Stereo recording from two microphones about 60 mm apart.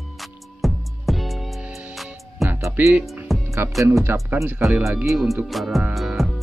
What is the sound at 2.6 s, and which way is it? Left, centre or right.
Music, right.